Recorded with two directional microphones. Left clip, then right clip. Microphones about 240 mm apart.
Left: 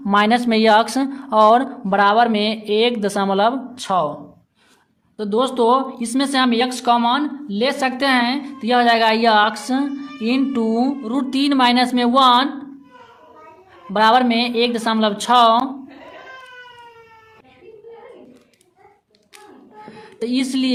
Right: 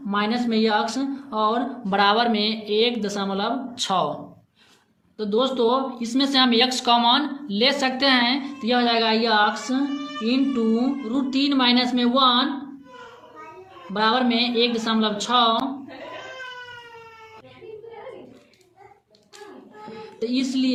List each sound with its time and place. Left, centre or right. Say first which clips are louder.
0.0 s speech: left 9 dB; left
1.9 s speech: left 5 dB; left
3.8 s speech: left 4 dB; left
5.1 s speech: left 3 dB; left
13.9 s speech: left 7 dB; left
19.8 s a sound: left 2 dB; left